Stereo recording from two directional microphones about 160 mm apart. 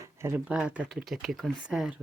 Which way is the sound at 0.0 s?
15° right (ahead or behind).